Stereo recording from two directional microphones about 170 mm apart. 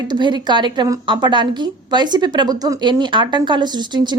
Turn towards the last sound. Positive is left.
turn(degrees=-25)  # may be behind; listen again after turning